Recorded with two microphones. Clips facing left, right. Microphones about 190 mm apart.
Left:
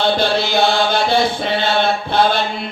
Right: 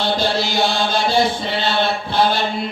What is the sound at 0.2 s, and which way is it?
Chant, 60° left (ahead or behind).